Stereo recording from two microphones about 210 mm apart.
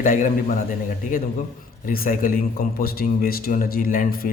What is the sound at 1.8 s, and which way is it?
A man's voice, 40° left (ahead or behind).